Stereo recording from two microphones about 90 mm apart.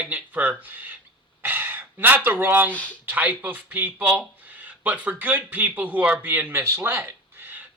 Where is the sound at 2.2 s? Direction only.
25° right (ahead or behind).